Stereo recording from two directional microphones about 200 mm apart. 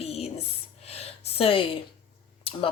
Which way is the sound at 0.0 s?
30° left (ahead or behind).